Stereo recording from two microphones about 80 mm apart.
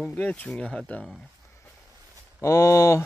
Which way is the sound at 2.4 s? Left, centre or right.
Left.